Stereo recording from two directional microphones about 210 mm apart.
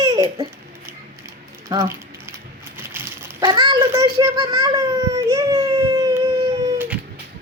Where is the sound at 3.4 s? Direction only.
20° right (ahead or behind).